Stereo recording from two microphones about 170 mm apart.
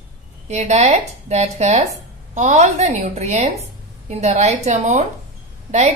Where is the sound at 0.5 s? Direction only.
40° right (ahead or behind).